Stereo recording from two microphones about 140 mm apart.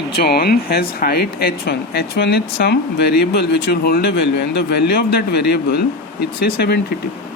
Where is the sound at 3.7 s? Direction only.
90° left.